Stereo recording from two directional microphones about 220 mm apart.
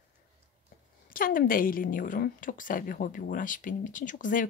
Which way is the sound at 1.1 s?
40° left (ahead or behind).